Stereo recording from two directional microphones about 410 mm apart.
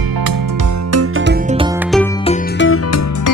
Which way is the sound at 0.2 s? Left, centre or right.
Right.